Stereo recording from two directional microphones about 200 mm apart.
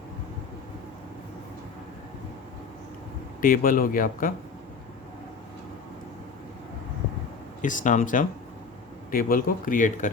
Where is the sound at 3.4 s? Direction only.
45° left (ahead or behind).